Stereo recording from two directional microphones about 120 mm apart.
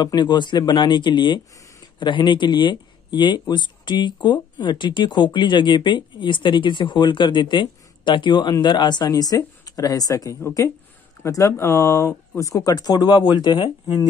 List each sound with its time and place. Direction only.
0.0 s speech: 35° left (ahead or behind)